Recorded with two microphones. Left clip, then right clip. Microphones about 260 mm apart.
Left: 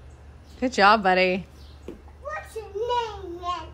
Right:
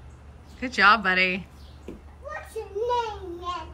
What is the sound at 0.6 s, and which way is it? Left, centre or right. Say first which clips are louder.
Speech: left 1 dB; centre.